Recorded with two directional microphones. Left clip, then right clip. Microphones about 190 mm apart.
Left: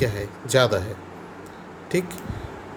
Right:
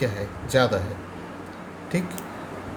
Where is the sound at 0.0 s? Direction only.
45° left (ahead or behind).